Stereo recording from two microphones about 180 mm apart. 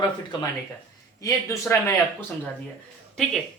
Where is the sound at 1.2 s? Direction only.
15° left (ahead or behind).